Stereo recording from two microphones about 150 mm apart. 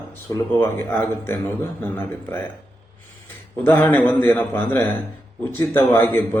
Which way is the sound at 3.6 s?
10° left (ahead or behind).